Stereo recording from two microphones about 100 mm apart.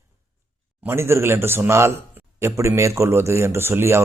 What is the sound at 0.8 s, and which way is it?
A man's voice, 25° right (ahead or behind).